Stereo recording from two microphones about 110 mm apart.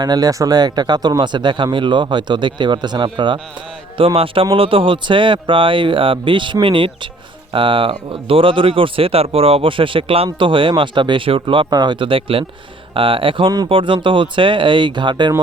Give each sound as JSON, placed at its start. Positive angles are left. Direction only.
{"t": 0.0, "sound": "speech", "side_deg": -35}